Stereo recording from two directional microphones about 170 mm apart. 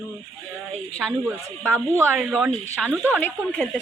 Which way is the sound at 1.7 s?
15° right (ahead or behind).